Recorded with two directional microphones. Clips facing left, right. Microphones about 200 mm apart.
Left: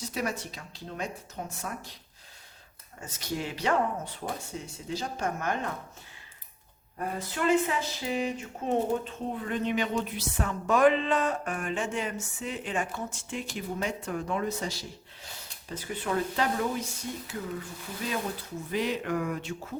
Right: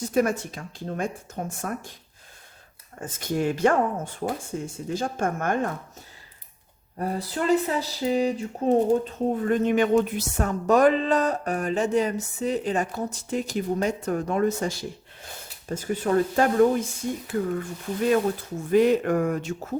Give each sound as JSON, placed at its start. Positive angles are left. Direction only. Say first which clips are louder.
{"t": 0.0, "sound": "speech", "louder": "right 10 dB", "side_deg": -50}
{"t": 3.0, "sound": "speech", "louder": "right 8 dB", "side_deg": -50}
{"t": 7.0, "sound": "speech", "louder": "right 3 dB", "side_deg": -35}
{"t": 18.7, "sound": "speech", "louder": "right 10 dB", "side_deg": -50}